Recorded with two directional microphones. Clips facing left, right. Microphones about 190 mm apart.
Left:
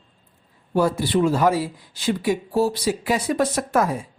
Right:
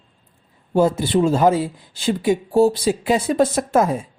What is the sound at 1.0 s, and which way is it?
Speech, 25° right (ahead or behind).